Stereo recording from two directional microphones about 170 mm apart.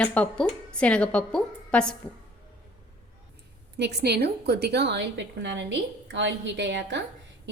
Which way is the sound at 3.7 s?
75° right (ahead or behind).